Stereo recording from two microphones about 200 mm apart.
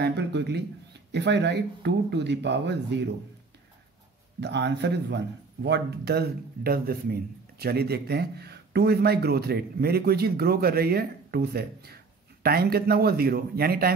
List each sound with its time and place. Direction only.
0.0 s speech: 55° right (ahead or behind)
4.4 s a man's voice: 60° right (ahead or behind)